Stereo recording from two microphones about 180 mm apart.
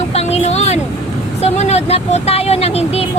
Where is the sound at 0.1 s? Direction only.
35° left (ahead or behind).